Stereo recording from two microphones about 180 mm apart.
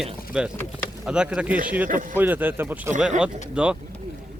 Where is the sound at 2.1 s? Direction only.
10° right (ahead or behind).